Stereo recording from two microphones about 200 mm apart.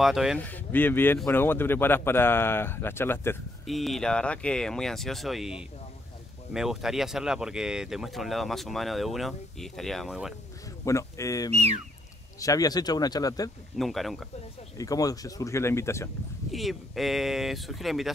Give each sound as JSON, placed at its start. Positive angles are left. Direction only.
{"t": 0.0, "sound": "speech", "side_deg": 0}
{"t": 0.4, "sound": "speech", "side_deg": 10}
{"t": 3.6, "sound": "speech", "side_deg": 0}
{"t": 10.9, "sound": "speech", "side_deg": 15}
{"t": 13.7, "sound": "speech", "side_deg": 0}
{"t": 14.8, "sound": "speech", "side_deg": 15}
{"t": 16.5, "sound": "speech", "side_deg": 0}